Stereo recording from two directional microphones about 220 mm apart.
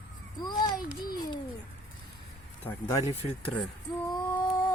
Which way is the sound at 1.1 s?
20° left (ahead or behind).